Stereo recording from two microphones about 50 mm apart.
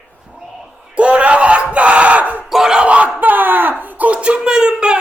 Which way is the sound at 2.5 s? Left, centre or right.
Centre.